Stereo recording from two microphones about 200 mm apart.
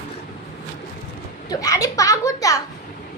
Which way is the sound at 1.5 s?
15° left (ahead or behind).